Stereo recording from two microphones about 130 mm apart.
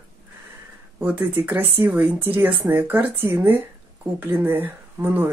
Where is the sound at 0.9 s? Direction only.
15° right (ahead or behind).